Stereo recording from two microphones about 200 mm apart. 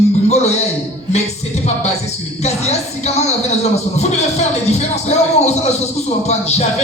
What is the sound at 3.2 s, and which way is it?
Speech, 35° left (ahead or behind).